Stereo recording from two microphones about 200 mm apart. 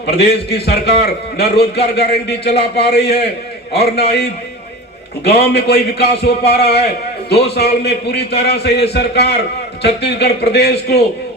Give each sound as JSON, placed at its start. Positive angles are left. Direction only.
{"t": 0.0, "sound": "a man's voice", "side_deg": 55}
{"t": 5.2, "sound": "a man's voice", "side_deg": 55}